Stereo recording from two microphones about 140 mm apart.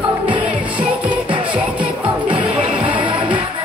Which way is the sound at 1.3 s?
35° right (ahead or behind).